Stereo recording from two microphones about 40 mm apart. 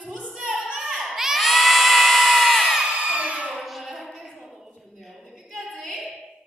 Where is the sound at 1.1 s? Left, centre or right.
Centre.